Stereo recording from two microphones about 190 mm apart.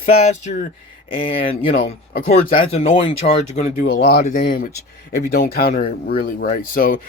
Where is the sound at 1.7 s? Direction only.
45° left (ahead or behind).